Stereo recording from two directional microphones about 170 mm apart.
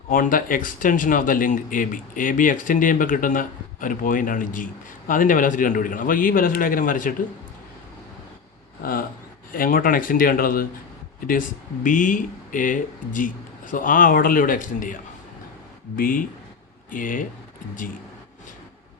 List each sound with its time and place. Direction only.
0.1 s speech: 55° left (ahead or behind)
8.8 s speech: 60° left (ahead or behind)
16.0 s speech: 55° left (ahead or behind)